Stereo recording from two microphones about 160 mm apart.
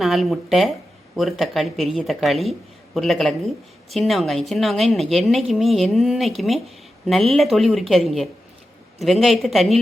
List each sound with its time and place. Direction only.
0.0 s speech: centre (ahead or behind)